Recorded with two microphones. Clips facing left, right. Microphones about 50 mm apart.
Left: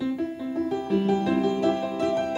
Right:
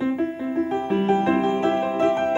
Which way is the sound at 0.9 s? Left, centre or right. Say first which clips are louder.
Right 3 dB; right.